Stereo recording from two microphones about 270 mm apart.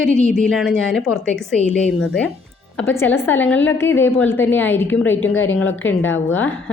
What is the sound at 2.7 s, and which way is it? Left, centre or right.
A woman's voice, centre.